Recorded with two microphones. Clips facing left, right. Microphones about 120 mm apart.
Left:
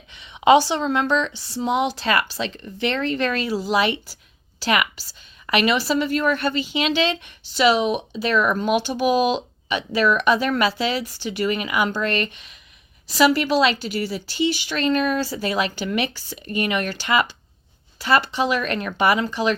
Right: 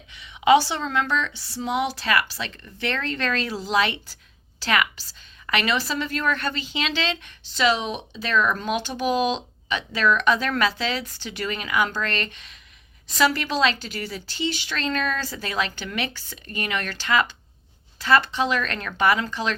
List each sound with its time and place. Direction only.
0.1 s a woman's voice: 25° left (ahead or behind)